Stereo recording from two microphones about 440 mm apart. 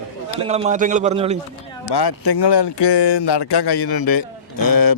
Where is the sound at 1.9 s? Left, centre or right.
Left.